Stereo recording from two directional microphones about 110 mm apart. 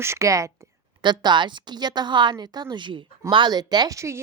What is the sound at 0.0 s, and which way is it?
Speech, 25° right (ahead or behind).